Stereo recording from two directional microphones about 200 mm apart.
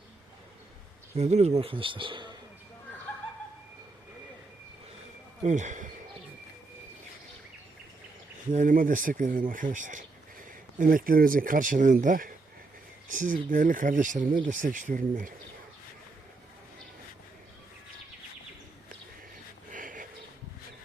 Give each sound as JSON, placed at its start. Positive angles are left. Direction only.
{"t": 1.1, "sound": "speech", "side_deg": -35}
{"t": 5.4, "sound": "speech", "side_deg": -35}
{"t": 8.5, "sound": "speech", "side_deg": -40}
{"t": 19.7, "sound": "a sound", "side_deg": -40}